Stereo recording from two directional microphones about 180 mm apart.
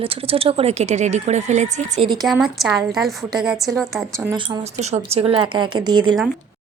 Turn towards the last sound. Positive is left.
turn(degrees=-25)  # may be behind; listen again after turning